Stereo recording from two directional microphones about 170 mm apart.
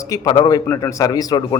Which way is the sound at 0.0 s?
20° left (ahead or behind).